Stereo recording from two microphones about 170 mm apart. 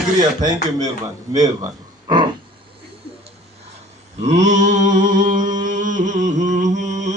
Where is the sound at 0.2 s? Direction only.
25° right (ahead or behind).